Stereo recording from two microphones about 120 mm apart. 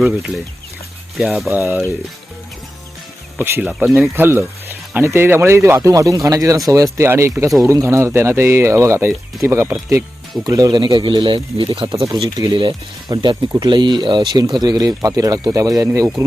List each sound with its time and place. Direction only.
0.0 s speech: centre (ahead or behind)
1.5 s speech: 15° right (ahead or behind)
3.3 s speech: 20° right (ahead or behind); by 11.7 s 45° right (ahead or behind)
11.9 s speech: 25° right (ahead or behind)
12.5 s speech: 40° right (ahead or behind)